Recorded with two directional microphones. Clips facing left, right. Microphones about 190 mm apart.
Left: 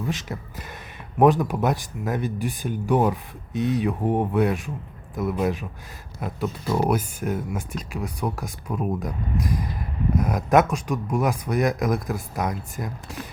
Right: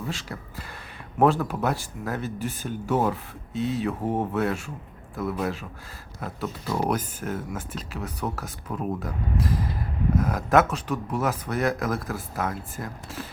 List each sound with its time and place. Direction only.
0.1 s speech: 20° left (ahead or behind)